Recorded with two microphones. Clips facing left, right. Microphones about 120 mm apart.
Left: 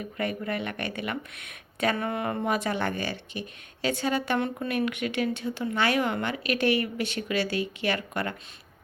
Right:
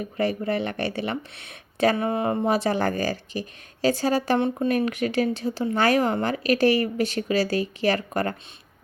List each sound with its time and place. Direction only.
0.0 s speech: 35° right (ahead or behind)
4.4 s speech: 25° right (ahead or behind)
4.7 s speech: 40° right (ahead or behind)